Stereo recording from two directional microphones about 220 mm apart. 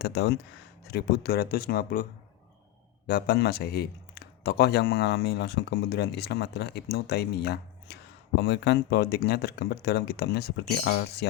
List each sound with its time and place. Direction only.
0.0 s speech: 50° left (ahead or behind)
3.1 s speech: 45° left (ahead or behind)